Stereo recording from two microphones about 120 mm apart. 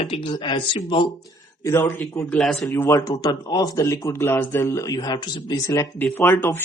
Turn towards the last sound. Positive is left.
turn(degrees=15)  # may be behind; listen again after turning